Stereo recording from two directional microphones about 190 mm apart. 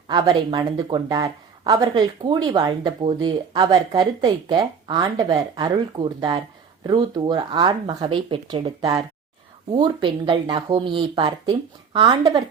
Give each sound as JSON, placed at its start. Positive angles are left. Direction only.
{"t": 0.1, "sound": "speech", "side_deg": -20}